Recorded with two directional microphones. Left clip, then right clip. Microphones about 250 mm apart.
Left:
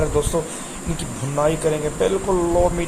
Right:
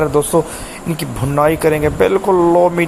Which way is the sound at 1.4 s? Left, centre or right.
Right.